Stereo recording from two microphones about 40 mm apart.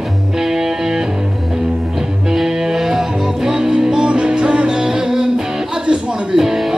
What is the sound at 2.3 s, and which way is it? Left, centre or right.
Music, centre.